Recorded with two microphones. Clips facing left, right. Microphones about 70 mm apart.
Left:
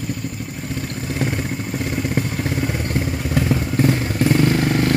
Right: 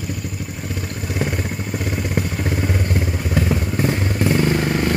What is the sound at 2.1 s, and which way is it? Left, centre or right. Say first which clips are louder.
Vehicle: even; centre.